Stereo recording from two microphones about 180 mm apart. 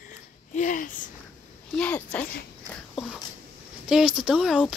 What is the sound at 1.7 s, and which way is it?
Speech, 5° left (ahead or behind).